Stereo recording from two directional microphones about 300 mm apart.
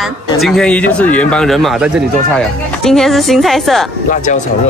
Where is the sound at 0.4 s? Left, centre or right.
Centre.